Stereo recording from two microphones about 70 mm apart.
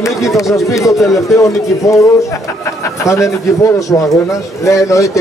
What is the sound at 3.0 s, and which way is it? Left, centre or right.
Speech, left.